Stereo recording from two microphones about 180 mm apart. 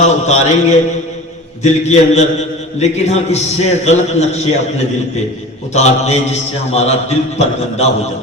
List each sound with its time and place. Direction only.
0.0 s a man's voice: 40° left (ahead or behind)
5.7 s a man's voice: 40° left (ahead or behind)